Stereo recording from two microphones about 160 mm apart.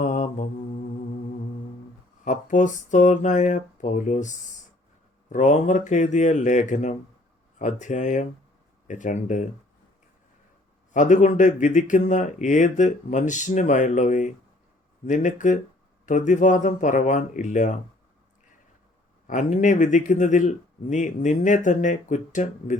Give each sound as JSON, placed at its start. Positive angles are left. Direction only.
{"t": 0.0, "sound": "mantra", "side_deg": 50}
{"t": 2.2, "sound": "speech", "side_deg": 50}
{"t": 10.9, "sound": "speech", "side_deg": 50}
{"t": 19.3, "sound": "speech", "side_deg": 50}